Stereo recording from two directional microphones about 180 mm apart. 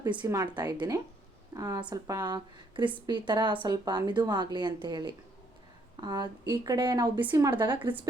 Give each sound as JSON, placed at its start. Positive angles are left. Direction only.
{"t": 0.1, "sound": "speech", "side_deg": -20}